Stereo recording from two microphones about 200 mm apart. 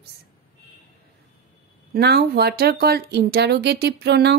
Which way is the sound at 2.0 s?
55° right (ahead or behind).